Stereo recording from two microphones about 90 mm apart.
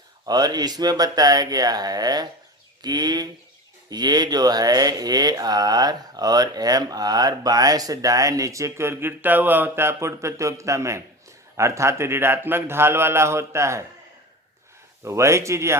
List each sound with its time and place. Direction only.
0.3 s a man's voice: 50° right (ahead or behind); by 13.8 s 30° right (ahead or behind)
15.0 s speech: 30° right (ahead or behind)